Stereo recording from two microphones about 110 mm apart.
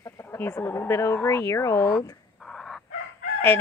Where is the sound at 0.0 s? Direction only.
20° left (ahead or behind).